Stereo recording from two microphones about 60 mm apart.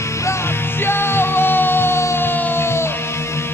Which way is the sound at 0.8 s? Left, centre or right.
Left.